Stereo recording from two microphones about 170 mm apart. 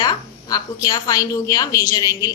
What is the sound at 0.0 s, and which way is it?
A woman's voice, 25° left (ahead or behind).